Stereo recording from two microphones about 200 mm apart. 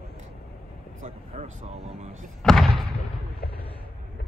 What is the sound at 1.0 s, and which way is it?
Speech, 35° right (ahead or behind).